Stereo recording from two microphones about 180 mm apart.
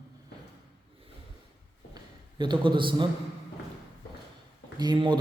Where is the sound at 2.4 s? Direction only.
25° right (ahead or behind).